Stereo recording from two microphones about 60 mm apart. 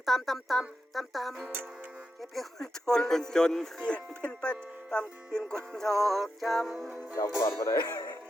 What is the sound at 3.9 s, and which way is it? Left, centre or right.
Speech, centre.